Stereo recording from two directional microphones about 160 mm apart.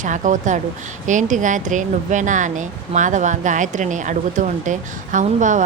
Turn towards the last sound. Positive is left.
turn(degrees=-50)  # may be behind; listen again after turning